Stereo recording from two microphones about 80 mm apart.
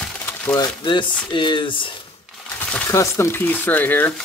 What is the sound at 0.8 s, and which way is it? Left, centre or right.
Speech, left.